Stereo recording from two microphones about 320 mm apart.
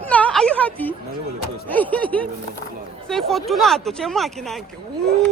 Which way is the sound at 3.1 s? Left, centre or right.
Centre.